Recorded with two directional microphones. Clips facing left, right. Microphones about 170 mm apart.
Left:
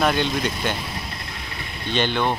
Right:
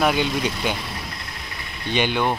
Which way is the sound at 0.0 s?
5° right (ahead or behind).